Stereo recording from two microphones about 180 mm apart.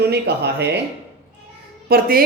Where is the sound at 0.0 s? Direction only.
65° right (ahead or behind).